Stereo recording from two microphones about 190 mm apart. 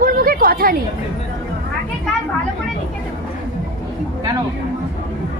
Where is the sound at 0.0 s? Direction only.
50° right (ahead or behind).